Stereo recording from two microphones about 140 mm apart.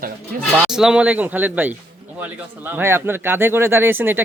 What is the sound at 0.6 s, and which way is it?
Speech, 5° right (ahead or behind).